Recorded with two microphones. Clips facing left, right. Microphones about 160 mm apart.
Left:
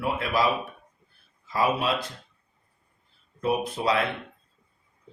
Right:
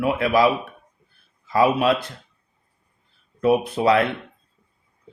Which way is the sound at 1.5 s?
60° right (ahead or behind).